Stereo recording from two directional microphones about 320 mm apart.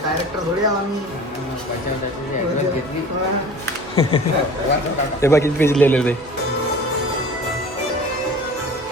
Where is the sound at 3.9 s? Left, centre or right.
Centre.